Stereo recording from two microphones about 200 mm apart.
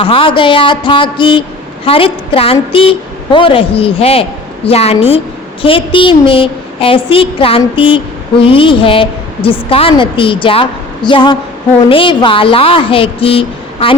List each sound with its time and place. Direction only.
0.0 s a woman's voice: 25° left (ahead or behind)